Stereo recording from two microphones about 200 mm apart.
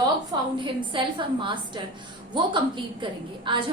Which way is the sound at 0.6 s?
25° right (ahead or behind).